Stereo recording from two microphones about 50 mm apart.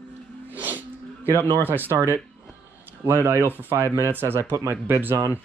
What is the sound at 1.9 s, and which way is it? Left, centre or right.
Speech, right.